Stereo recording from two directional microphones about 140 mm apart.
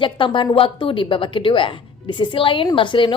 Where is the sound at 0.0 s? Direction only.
35° left (ahead or behind).